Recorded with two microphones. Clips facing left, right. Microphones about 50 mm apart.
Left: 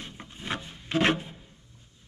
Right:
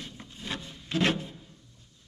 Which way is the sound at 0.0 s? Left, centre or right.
Left.